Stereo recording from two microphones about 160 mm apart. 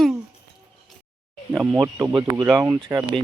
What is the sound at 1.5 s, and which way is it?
Speech, 15° right (ahead or behind).